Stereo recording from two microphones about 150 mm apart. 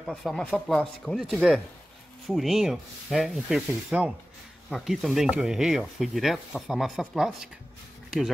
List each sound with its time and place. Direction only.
0.0 s speech: centre (ahead or behind)